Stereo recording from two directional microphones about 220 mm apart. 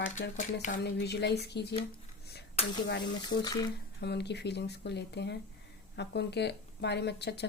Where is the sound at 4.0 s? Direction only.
50° left (ahead or behind).